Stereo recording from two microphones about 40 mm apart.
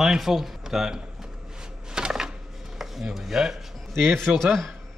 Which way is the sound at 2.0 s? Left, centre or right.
Centre.